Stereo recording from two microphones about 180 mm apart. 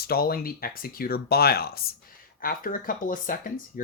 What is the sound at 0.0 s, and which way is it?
Speech, 55° left (ahead or behind).